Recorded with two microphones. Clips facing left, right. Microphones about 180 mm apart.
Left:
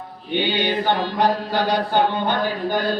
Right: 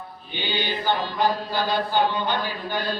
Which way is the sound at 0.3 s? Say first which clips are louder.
Left 7 dB; 60° left (ahead or behind).